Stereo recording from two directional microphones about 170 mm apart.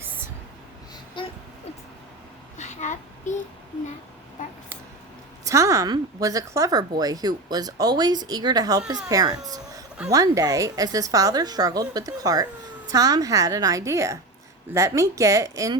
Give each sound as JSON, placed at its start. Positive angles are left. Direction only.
{"t": 1.2, "sound": "a sound", "side_deg": 30}
{"t": 2.6, "sound": "child singing", "side_deg": 45}
{"t": 5.5, "sound": "a woman's voice", "side_deg": -20}